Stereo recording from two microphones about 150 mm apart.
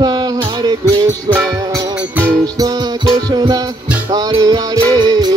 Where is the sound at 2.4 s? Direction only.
25° right (ahead or behind).